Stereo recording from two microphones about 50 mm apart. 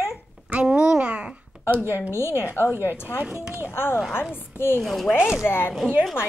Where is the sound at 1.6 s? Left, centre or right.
Right.